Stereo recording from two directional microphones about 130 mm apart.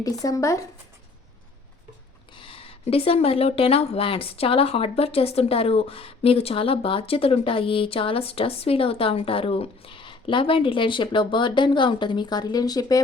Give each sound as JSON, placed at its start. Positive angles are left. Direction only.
{"t": 0.0, "sound": "speech", "side_deg": 25}
{"t": 2.3, "sound": "speech", "side_deg": 45}